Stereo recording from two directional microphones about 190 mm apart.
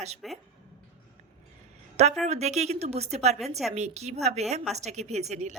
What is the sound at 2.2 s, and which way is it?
A woman's voice, 35° right (ahead or behind).